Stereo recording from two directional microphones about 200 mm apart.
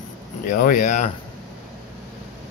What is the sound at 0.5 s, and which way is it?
Speech, 40° left (ahead or behind).